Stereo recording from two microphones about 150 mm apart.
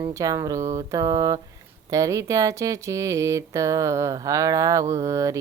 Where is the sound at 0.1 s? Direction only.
20° right (ahead or behind).